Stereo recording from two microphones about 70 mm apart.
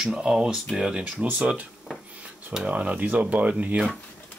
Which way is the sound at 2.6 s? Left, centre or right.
Centre.